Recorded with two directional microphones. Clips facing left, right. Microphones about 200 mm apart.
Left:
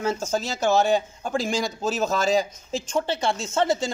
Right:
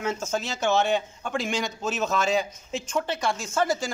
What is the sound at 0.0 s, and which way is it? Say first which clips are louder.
Speech: left 3 dB; 35° left (ahead or behind).